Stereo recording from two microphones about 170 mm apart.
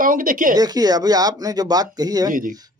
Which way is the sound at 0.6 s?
20° right (ahead or behind).